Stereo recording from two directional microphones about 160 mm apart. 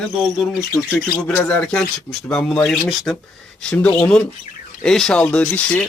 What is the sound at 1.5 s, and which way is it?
Speech, 5° left (ahead or behind).